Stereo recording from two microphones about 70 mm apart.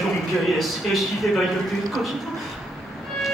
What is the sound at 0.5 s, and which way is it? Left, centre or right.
Speech, centre.